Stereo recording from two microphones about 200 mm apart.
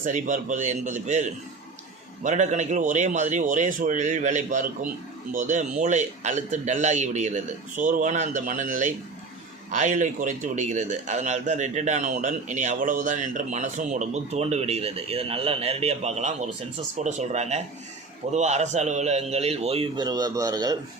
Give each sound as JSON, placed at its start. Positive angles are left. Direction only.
{"t": 0.0, "sound": "a man's voice", "side_deg": -40}